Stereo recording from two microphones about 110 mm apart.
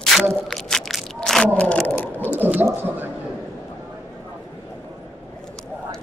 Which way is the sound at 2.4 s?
20° right (ahead or behind).